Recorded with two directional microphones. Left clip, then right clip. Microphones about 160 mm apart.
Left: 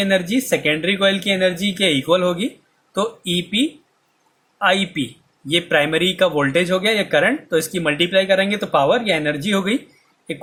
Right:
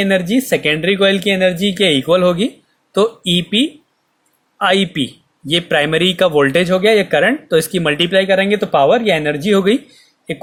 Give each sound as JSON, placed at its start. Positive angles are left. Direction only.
{"t": 0.0, "sound": "speech", "side_deg": -40}